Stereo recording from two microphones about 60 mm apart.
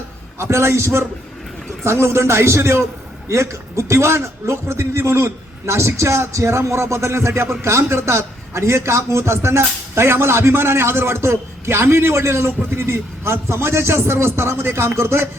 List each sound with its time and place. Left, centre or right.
0.5 s a man's voice: right